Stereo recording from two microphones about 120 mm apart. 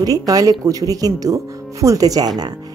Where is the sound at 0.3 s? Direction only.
30° right (ahead or behind).